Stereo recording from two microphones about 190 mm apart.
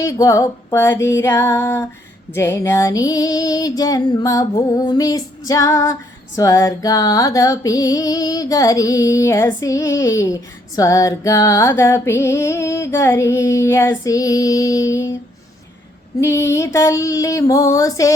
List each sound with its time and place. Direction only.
0.0 s female singing: 15° left (ahead or behind)
16.2 s female singing: 15° left (ahead or behind)